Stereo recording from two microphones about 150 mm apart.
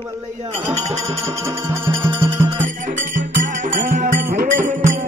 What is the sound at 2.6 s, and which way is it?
Music, 55° right (ahead or behind).